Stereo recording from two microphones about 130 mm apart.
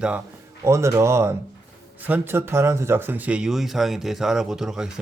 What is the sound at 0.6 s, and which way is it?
Speech, 20° right (ahead or behind).